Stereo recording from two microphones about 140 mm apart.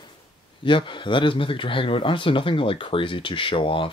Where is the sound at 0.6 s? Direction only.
35° left (ahead or behind).